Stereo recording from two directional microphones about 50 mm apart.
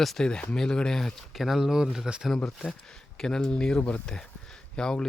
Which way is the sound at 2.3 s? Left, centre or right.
Centre.